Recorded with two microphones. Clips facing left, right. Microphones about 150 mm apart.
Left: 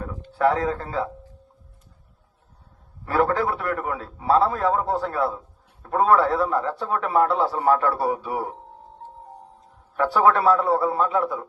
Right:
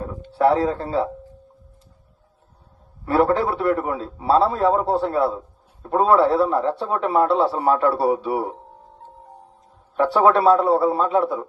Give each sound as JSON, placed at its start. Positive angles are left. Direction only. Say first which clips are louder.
{"t": 0.3, "sound": "a man's voice", "louder": "right 3 dB", "side_deg": -30}
{"t": 3.0, "sound": "a man's voice", "louder": "right 3 dB", "side_deg": -30}
{"t": 9.9, "sound": "a man's voice", "louder": "right 3 dB", "side_deg": -25}